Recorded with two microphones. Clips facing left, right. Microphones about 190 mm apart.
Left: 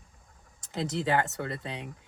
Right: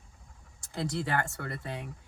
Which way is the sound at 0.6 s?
20° left (ahead or behind).